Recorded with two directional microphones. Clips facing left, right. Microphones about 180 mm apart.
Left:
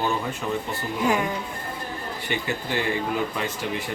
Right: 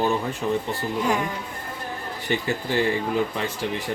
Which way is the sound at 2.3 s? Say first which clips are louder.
Right 4 dB; 40° right (ahead or behind).